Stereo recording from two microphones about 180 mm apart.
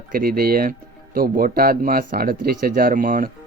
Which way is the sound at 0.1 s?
55° right (ahead or behind).